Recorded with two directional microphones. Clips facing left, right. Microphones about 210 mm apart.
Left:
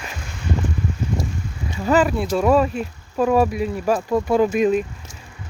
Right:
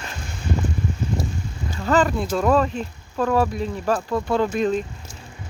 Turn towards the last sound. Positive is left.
turn(degrees=10)  # may be behind; listen again after turning